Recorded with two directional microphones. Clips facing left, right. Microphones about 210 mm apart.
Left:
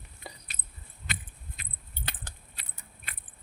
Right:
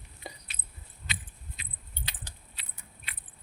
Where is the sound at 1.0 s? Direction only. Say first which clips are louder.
Left 2 dB; 50° left (ahead or behind).